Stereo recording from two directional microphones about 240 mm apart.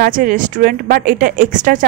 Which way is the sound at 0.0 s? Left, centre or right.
Right.